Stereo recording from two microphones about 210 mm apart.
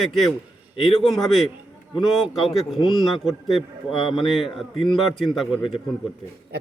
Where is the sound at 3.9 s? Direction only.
25° left (ahead or behind).